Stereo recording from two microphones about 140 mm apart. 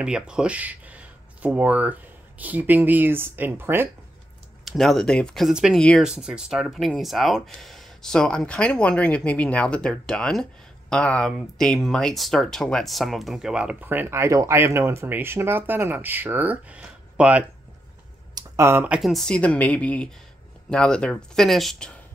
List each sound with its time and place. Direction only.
0.0 s speech: 5° right (ahead or behind)
4.6 s speech: centre (ahead or behind)
5.8 s speech: 5° left (ahead or behind)
6.0 s speech: 5° right (ahead or behind)
18.3 s a sound: 20° right (ahead or behind)
18.9 s speech: centre (ahead or behind)